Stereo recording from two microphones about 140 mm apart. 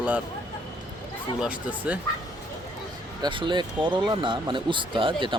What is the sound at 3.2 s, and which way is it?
Speech, 35° right (ahead or behind).